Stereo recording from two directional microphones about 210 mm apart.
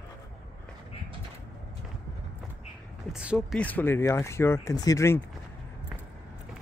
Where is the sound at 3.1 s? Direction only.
5° right (ahead or behind).